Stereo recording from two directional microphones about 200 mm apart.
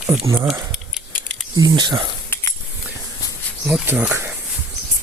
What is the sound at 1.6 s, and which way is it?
Speech, 20° right (ahead or behind).